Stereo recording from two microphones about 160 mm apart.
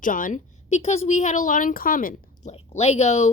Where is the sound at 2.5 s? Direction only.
40° left (ahead or behind).